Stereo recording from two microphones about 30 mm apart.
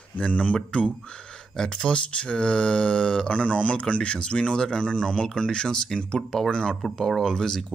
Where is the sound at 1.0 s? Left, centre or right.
Left.